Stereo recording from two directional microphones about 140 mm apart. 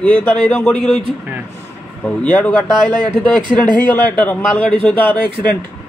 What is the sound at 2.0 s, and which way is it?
A man's voice, 10° left (ahead or behind).